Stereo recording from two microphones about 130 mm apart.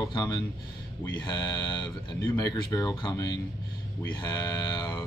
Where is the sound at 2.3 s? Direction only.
30° left (ahead or behind).